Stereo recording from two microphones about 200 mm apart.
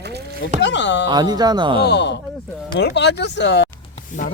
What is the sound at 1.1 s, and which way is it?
Speech, 20° right (ahead or behind).